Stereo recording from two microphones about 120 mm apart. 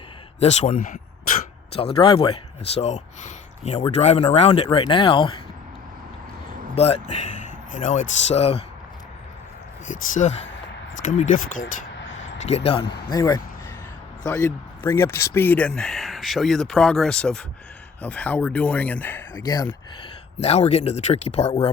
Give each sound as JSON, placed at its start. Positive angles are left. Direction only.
{"t": 0.3, "sound": "speech", "side_deg": 65}
{"t": 1.7, "sound": "speech", "side_deg": 55}
{"t": 3.9, "sound": "speech", "side_deg": 60}
{"t": 4.8, "sound": "speech", "side_deg": 45}
{"t": 6.7, "sound": "speech", "side_deg": 60}
{"t": 9.8, "sound": "speech", "side_deg": 90}
{"t": 12.5, "sound": "speech", "side_deg": 60}
{"t": 13.1, "sound": "speech", "side_deg": 30}
{"t": 19.5, "sound": "speech", "side_deg": 35}
{"t": 20.4, "sound": "speech", "side_deg": 60}